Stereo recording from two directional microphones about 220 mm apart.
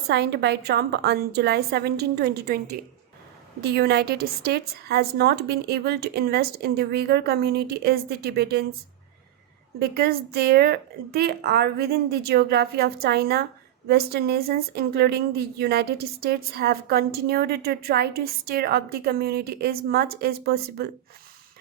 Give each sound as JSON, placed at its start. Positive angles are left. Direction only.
{"t": 0.1, "sound": "a woman's voice", "side_deg": -50}
{"t": 9.9, "sound": "a woman's voice", "side_deg": -45}